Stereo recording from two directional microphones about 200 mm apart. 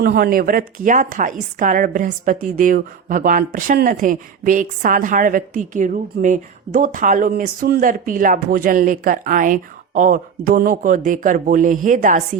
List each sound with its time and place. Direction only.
0.0 s speech: 50° right (ahead or behind)